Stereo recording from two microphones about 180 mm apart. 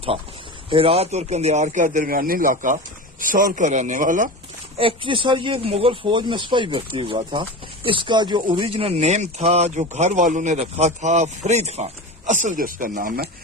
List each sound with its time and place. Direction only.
0.7 s a man's voice: 30° right (ahead or behind)
4.8 s speech: 30° right (ahead or behind); by 13.2 s 50° right (ahead or behind)